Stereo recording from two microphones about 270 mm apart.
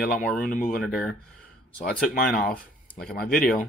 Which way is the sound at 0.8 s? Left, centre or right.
Centre.